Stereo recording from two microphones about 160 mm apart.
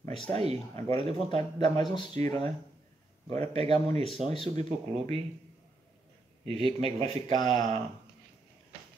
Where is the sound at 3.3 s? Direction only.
40° right (ahead or behind).